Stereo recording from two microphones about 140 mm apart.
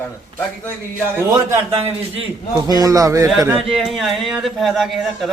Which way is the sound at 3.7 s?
5° right (ahead or behind).